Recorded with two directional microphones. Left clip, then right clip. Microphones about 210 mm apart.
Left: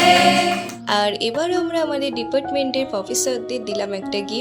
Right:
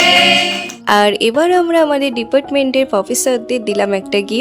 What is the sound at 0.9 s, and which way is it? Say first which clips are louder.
A woman's voice: right 8 dB; 50° right (ahead or behind).